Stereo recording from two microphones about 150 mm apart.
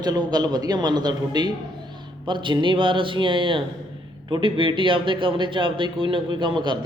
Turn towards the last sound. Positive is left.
turn(degrees=-30)  # may be behind; listen again after turning